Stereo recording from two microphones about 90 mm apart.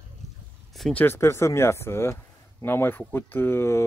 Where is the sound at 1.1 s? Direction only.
30° left (ahead or behind).